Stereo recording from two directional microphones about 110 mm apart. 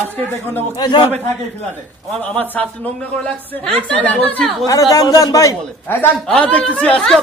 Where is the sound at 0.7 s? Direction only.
45° left (ahead or behind).